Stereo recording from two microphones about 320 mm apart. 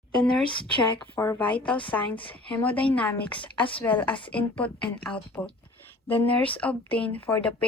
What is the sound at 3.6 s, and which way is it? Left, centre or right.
Speech, centre.